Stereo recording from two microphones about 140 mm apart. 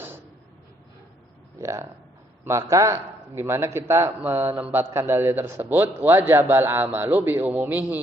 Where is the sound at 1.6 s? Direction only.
20° right (ahead or behind).